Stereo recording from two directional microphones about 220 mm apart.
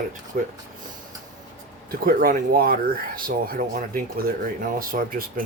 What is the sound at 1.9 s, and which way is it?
Speech, 40° right (ahead or behind).